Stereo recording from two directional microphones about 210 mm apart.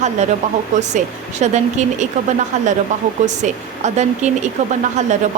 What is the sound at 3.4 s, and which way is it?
Speech, 35° right (ahead or behind).